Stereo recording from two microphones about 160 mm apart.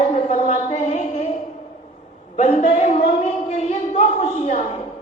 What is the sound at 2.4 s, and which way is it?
Speech, 45° left (ahead or behind).